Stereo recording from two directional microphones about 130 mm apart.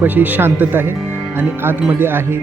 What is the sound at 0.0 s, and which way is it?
Speech, 15° right (ahead or behind).